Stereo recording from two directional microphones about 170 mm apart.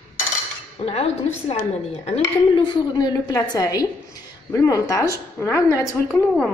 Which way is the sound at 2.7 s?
25° left (ahead or behind).